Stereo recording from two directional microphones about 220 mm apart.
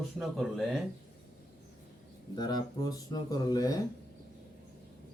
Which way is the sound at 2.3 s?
20° left (ahead or behind).